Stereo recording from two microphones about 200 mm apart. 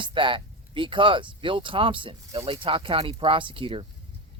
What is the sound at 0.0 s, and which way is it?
Speech, 25° right (ahead or behind).